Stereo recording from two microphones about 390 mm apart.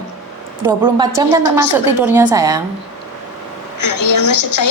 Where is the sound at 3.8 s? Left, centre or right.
Left.